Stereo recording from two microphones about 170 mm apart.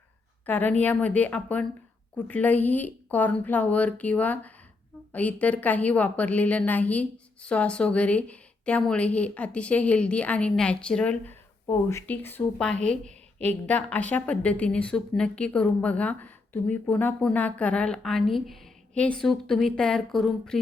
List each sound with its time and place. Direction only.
0.4 s speech: 10° left (ahead or behind)